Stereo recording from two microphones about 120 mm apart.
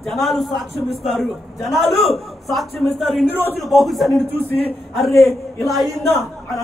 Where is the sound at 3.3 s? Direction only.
15° left (ahead or behind).